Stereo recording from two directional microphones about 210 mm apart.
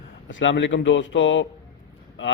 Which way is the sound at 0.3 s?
65° left (ahead or behind).